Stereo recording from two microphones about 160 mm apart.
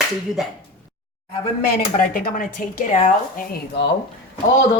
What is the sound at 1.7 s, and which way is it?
Speech, 65° left (ahead or behind).